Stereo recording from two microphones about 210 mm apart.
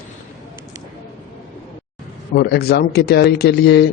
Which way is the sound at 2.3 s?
50° left (ahead or behind).